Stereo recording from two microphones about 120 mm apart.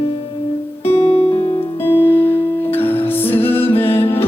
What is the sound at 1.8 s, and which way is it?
Music, 20° left (ahead or behind).